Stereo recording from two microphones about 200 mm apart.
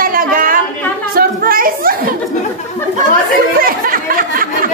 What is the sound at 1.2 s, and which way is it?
Music, 45° right (ahead or behind).